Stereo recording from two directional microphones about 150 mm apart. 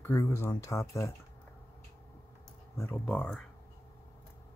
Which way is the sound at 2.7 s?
15° left (ahead or behind).